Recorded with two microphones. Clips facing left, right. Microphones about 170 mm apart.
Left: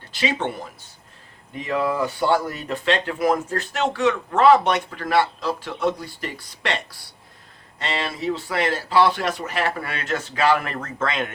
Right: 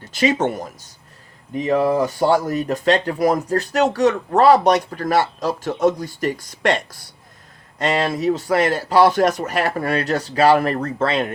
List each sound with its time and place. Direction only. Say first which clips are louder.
0.1 s speech: right 6 dB; 45° right (ahead or behind)